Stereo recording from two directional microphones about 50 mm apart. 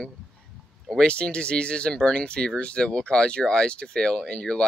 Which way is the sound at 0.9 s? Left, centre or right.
Centre.